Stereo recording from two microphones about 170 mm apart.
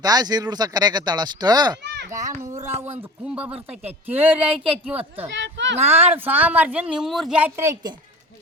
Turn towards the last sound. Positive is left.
turn(degrees=-20)  # may be behind; listen again after turning